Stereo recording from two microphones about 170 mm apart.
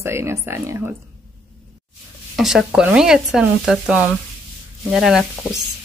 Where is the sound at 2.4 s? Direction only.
Centre (ahead or behind).